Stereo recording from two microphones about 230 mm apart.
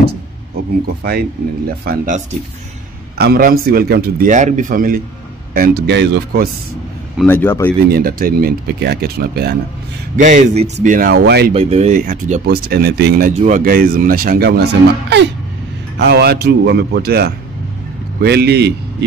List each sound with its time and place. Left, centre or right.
1.9 s speech: right
7.2 s speech: centre
7.9 s speech: right
11.5 s a man's voice: right